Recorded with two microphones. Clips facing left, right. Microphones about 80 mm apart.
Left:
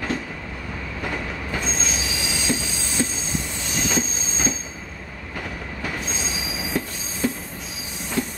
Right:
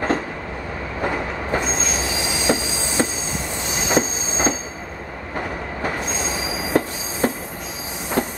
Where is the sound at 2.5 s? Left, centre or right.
Right.